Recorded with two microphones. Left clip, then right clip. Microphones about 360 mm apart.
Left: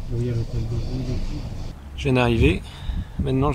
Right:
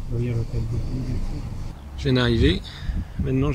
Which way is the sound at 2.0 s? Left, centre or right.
Centre.